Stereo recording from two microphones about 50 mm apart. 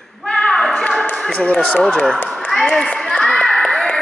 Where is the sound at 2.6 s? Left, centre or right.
Centre.